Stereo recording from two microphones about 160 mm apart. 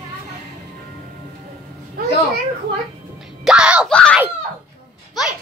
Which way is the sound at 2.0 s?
70° right (ahead or behind).